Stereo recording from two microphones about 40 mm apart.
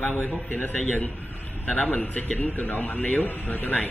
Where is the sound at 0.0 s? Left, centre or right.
Left.